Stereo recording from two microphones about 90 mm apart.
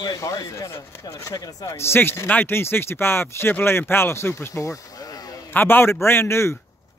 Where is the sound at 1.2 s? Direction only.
40° left (ahead or behind).